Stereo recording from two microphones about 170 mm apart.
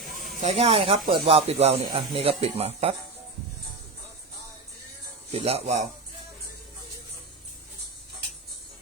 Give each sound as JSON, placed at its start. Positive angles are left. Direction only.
{"t": 0.0, "sound": "a sound", "side_deg": 0}
{"t": 0.4, "sound": "speech", "side_deg": -35}
{"t": 5.3, "sound": "speech", "side_deg": -35}